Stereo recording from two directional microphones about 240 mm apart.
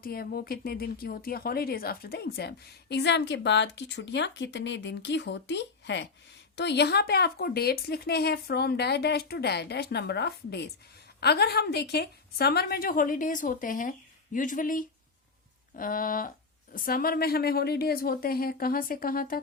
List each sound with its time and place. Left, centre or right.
0.0 s a woman's voice: left